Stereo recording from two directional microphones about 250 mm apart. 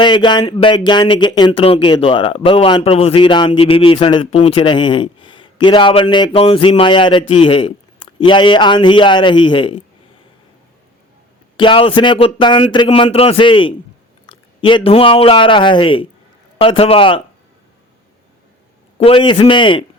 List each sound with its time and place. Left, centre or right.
0.0 s speech: centre
11.5 s speech: centre
18.9 s speech: left